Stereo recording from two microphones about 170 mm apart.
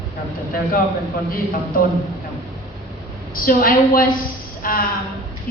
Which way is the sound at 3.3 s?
55° left (ahead or behind).